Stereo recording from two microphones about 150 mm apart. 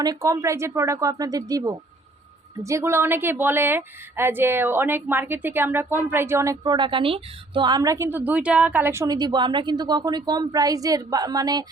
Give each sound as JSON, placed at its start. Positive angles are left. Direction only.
{"t": 0.0, "sound": "a woman's voice", "side_deg": -25}
{"t": 6.7, "sound": "a woman's voice", "side_deg": -35}